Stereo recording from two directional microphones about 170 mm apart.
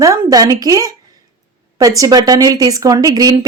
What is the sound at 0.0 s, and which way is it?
A woman's voice, 20° right (ahead or behind).